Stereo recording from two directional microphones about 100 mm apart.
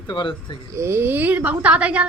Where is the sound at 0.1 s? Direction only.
55° left (ahead or behind).